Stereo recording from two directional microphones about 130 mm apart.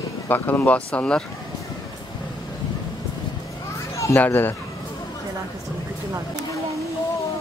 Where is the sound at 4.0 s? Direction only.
20° left (ahead or behind).